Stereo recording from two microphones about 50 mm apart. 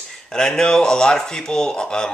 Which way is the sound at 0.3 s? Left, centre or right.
Centre.